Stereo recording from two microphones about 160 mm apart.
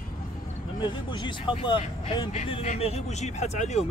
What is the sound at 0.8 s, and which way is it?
Speech, 30° left (ahead or behind).